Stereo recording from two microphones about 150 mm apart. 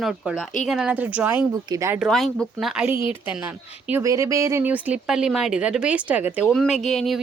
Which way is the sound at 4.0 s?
20° right (ahead or behind).